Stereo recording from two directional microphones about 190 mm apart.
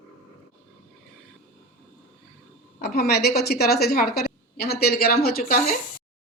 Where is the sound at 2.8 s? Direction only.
50° left (ahead or behind).